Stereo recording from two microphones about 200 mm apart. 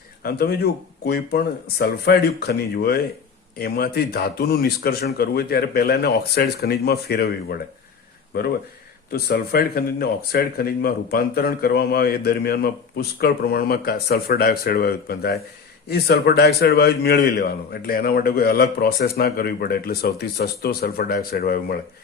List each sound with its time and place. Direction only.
0.2 s speech: 50° left (ahead or behind)
9.1 s speech: 50° left (ahead or behind)